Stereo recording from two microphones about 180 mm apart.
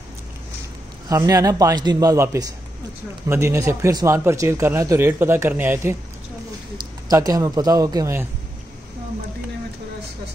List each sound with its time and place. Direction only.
1.0 s a man's voice: 20° right (ahead or behind)
7.1 s a man's voice: 20° right (ahead or behind)